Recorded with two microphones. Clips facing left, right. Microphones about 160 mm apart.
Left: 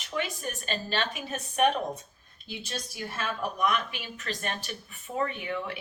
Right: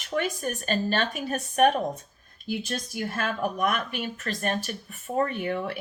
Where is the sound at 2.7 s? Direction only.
50° right (ahead or behind).